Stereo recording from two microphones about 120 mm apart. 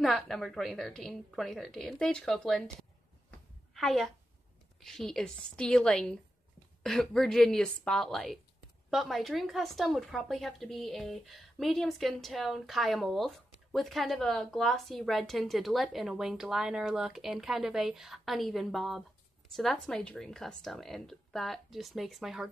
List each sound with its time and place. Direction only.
0.0 s a woman's voice: centre (ahead or behind)